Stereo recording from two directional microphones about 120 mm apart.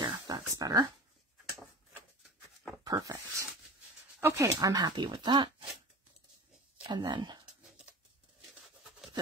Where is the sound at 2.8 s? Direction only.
30° right (ahead or behind).